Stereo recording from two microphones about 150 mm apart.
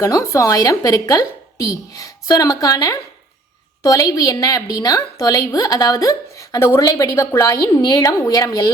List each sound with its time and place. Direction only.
0.0 s a woman's voice: 20° left (ahead or behind)